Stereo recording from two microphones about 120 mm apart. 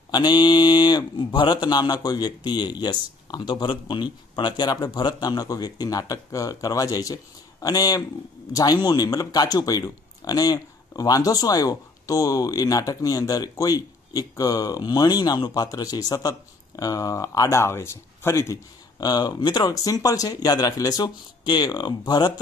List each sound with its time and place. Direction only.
0.1 s speech: 35° left (ahead or behind)
18.9 s speech: 35° left (ahead or behind)